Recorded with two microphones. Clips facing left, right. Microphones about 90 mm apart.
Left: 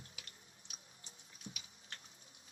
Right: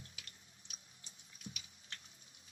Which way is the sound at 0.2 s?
30° left (ahead or behind).